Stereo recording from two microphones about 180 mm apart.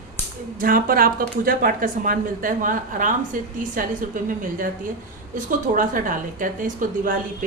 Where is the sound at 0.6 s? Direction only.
50° right (ahead or behind).